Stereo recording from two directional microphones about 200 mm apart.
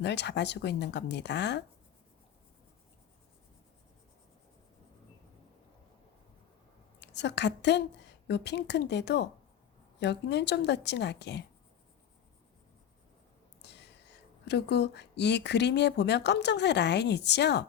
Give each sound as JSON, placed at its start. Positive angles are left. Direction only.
{"t": 0.0, "sound": "speech", "side_deg": 60}
{"t": 7.0, "sound": "a woman's voice", "side_deg": 60}
{"t": 13.6, "sound": "whispering", "side_deg": 60}
{"t": 14.4, "sound": "speech", "side_deg": 60}